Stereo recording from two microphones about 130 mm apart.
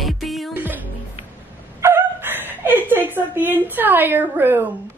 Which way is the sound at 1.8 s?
15° right (ahead or behind).